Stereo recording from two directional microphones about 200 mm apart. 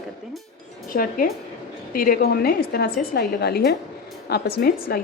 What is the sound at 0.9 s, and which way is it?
A woman's voice, 45° left (ahead or behind).